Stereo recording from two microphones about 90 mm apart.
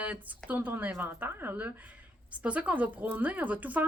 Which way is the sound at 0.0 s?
15° right (ahead or behind).